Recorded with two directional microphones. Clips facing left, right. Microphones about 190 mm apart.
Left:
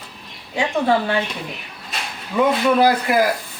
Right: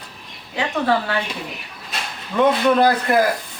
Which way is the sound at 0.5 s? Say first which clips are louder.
Left 2 dB; 15° left (ahead or behind).